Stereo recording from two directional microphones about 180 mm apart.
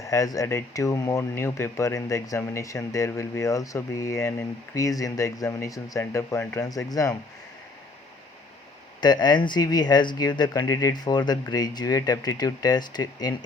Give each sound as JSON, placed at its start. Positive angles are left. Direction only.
{"t": 0.0, "sound": "speech", "side_deg": 20}
{"t": 9.0, "sound": "speech", "side_deg": 25}